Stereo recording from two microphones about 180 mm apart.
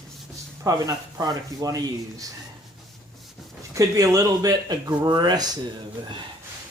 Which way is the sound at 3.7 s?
20° right (ahead or behind).